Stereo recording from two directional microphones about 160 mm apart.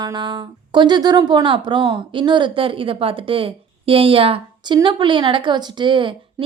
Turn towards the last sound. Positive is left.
turn(degrees=-30)  # may be behind; listen again after turning